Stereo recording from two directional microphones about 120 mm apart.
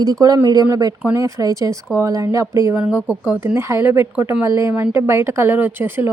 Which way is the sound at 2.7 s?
10° right (ahead or behind).